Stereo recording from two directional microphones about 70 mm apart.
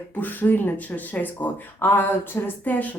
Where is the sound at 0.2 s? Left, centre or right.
Left.